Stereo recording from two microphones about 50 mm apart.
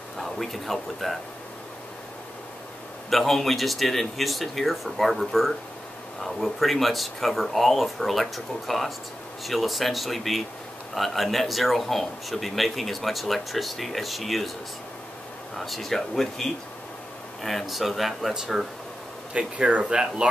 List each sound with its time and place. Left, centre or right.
0.2 s speech: centre
3.1 s speech: centre
15.5 s speech: centre
19.3 s speech: right